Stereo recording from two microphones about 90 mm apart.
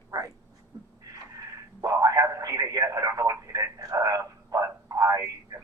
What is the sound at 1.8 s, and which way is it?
Radio, 40° right (ahead or behind).